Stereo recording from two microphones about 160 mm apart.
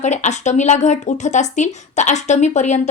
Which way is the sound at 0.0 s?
45° left (ahead or behind).